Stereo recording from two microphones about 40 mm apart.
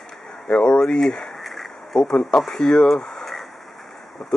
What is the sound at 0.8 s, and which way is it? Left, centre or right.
Speech, centre.